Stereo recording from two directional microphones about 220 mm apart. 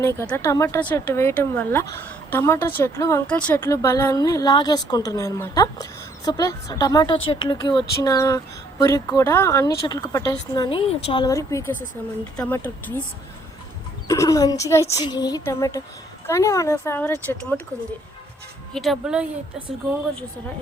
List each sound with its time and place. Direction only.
0.0 s speech: 10° left (ahead or behind)
14.1 s speech: 15° left (ahead or behind)
18.7 s a woman's voice: centre (ahead or behind)